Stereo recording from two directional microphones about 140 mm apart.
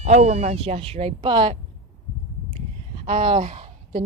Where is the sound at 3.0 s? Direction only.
45° right (ahead or behind).